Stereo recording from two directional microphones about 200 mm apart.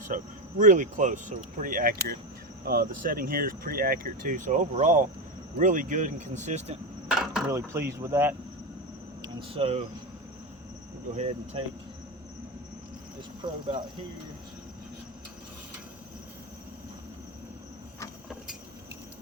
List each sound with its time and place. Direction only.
0.6 s speech: 40° right (ahead or behind)
7.1 s a sound: 5° right (ahead or behind)
7.5 s speech: 15° right (ahead or behind)
9.2 s speech: 25° right (ahead or behind)
11.1 s speech: 35° right (ahead or behind)
13.4 s speech: 25° right (ahead or behind)